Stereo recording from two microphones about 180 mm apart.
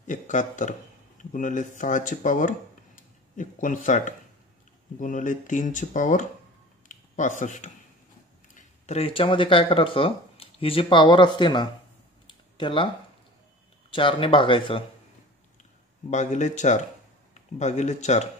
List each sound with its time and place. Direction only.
0.0 s speech: 45° left (ahead or behind); by 11.7 s 25° left (ahead or behind)
12.3 s a sound: 25° left (ahead or behind)
13.8 s speech: 30° left (ahead or behind)
16.1 s speech: 40° left (ahead or behind)